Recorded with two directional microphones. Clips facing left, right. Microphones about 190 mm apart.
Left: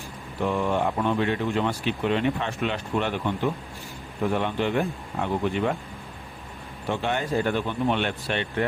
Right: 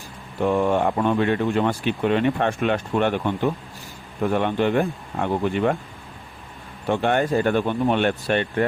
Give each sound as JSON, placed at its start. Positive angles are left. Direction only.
{"t": 0.4, "sound": "speech", "side_deg": -50}
{"t": 4.4, "sound": "speech", "side_deg": -55}
{"t": 6.8, "sound": "speech", "side_deg": -55}